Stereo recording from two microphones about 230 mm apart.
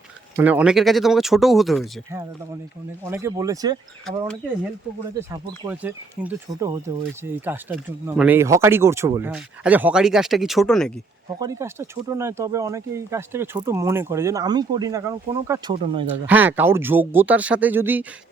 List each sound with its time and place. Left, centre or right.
0.3 s speech: centre
3.0 s speech: centre
5.3 s speech: centre
11.3 s speech: centre
16.2 s speech: centre